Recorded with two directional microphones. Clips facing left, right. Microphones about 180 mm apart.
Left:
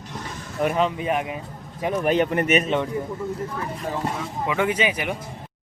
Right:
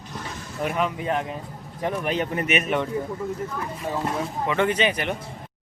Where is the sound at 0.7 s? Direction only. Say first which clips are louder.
Right 1 dB; 20° left (ahead or behind).